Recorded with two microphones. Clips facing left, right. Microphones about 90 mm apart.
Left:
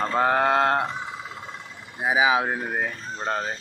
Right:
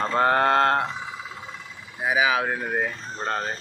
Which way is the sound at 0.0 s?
5° left (ahead or behind).